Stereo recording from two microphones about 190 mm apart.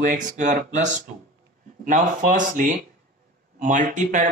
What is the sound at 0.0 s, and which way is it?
A man's voice, 45° right (ahead or behind).